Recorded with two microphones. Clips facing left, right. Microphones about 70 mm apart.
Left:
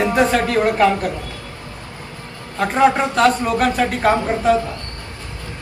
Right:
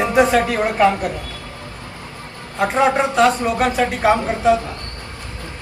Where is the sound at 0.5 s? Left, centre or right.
Right.